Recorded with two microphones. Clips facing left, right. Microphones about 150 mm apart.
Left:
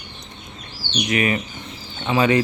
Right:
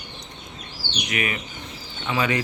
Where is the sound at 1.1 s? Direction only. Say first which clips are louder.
Left 7 dB; 35° left (ahead or behind).